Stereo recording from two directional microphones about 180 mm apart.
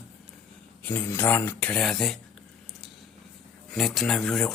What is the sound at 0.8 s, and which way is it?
Speech, 10° left (ahead or behind).